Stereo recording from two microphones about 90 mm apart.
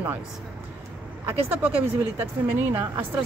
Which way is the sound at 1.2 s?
20° right (ahead or behind).